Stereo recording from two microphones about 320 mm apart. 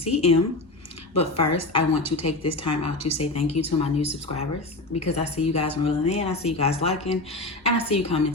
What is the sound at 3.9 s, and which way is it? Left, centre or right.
A woman's voice, centre.